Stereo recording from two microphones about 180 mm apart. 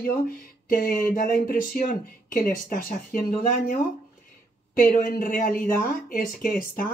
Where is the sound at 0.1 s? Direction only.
50° left (ahead or behind).